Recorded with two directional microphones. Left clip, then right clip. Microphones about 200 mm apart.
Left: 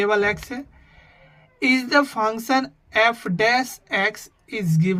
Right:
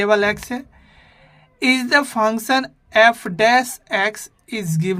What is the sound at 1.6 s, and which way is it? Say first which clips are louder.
A woman's voice: right 2 dB; 40° right (ahead or behind).